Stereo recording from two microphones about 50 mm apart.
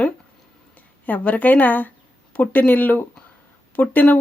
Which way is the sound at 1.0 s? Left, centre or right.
Left.